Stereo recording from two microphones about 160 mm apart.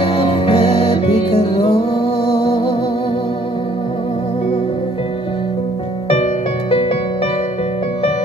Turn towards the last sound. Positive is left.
turn(degrees=35)  # may be behind; listen again after turning